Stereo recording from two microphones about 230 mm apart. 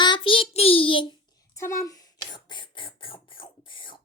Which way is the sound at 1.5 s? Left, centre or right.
Centre.